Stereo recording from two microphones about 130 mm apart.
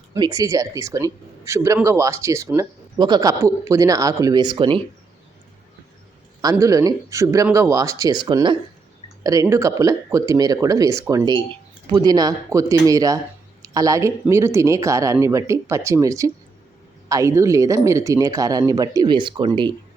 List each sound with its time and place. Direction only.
0.1 s speech: 25° right (ahead or behind)
6.4 s speech: 25° right (ahead or behind)